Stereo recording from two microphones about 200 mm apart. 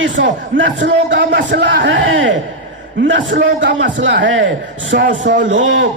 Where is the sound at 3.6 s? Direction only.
65° right (ahead or behind).